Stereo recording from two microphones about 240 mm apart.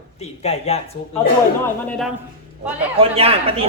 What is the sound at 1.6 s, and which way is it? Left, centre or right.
Speech, centre.